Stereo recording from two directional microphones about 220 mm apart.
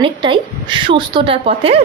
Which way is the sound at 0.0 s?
20° right (ahead or behind).